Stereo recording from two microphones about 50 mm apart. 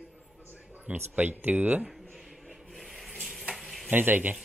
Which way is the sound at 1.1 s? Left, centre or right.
Right.